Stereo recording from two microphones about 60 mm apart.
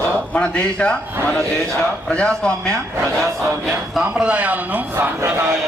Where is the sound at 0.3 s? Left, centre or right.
Centre.